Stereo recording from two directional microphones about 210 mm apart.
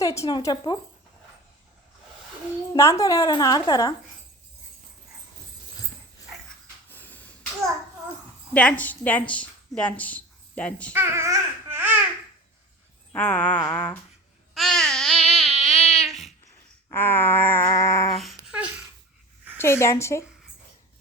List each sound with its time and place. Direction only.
0.0 s speech: 15° left (ahead or behind)
2.7 s a woman's voice: 15° left (ahead or behind)
6.9 s a sound: 10° left (ahead or behind)
8.5 s a woman's voice: 5° left (ahead or behind)
10.9 s babbling: 10° right (ahead or behind)
13.1 s a woman's voice: 5° left (ahead or behind)
14.5 s babbling: centre (ahead or behind)
16.0 s a sound: centre (ahead or behind)
16.9 s a woman's voice: 10° left (ahead or behind)
18.5 s babbling: 5° right (ahead or behind)
19.5 s a woman's voice: 10° left (ahead or behind)